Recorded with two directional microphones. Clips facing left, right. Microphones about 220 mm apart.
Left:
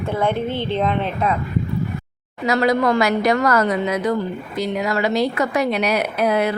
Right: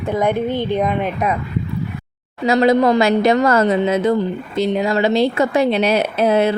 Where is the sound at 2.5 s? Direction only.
20° right (ahead or behind).